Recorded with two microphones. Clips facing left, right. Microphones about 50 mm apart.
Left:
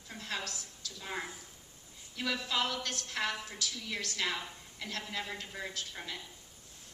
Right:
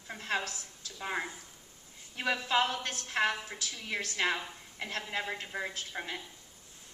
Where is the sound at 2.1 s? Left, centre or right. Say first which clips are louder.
Right 5 dB; right.